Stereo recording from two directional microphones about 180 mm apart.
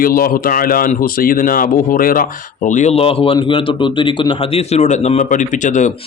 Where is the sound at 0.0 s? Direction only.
55° left (ahead or behind).